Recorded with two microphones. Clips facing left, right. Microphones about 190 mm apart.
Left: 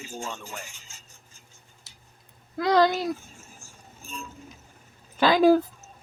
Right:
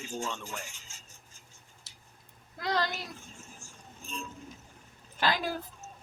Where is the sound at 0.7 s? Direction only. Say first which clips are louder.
Left 2 dB; 65° left (ahead or behind).